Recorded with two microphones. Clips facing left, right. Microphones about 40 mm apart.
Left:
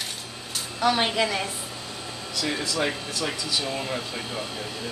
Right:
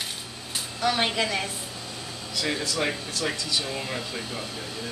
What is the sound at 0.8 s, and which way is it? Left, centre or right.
Speech, centre.